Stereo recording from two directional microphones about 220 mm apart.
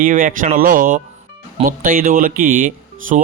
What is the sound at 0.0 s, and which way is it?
Speech, 35° right (ahead or behind).